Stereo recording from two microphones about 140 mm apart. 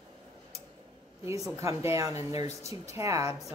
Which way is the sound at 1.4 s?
20° right (ahead or behind).